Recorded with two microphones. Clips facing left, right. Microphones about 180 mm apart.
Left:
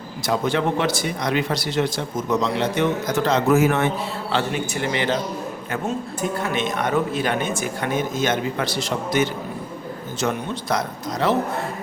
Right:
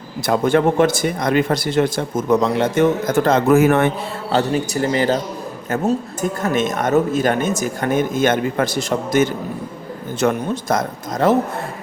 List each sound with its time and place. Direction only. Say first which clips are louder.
0.3 s speech: right 6 dB; 50° right (ahead or behind)
4.3 s a man's voice: right 6 dB; 40° right (ahead or behind)
6.4 s speech: right 7 dB; 45° right (ahead or behind)